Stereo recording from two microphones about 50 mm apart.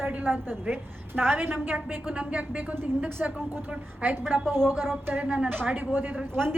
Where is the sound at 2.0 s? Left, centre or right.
Right.